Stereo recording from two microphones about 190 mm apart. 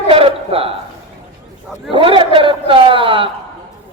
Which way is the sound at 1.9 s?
25° right (ahead or behind).